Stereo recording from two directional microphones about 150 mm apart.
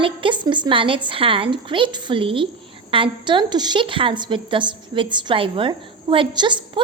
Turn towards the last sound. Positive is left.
turn(degrees=-30)  # may be behind; listen again after turning